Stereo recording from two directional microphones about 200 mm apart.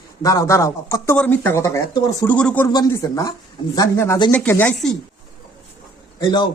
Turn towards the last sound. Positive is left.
turn(degrees=20)  # may be behind; listen again after turning